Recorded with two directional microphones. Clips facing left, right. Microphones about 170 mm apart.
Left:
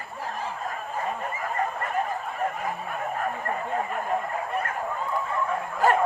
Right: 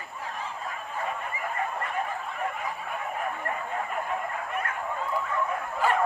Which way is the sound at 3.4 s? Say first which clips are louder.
Left 3 dB; 35° left (ahead or behind).